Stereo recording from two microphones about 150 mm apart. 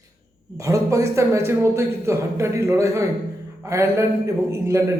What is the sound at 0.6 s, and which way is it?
A man's voice, 20° right (ahead or behind).